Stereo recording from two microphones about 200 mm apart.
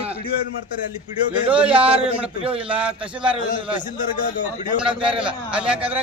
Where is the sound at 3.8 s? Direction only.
40° left (ahead or behind).